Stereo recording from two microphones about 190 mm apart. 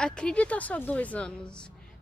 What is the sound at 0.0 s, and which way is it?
A woman's voice, 5° left (ahead or behind).